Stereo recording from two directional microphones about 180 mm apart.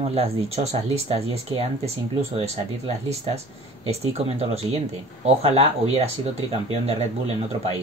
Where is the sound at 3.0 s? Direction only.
35° right (ahead or behind).